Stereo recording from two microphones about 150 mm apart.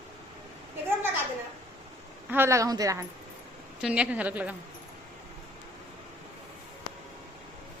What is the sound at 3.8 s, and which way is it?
Speech, 5° right (ahead or behind).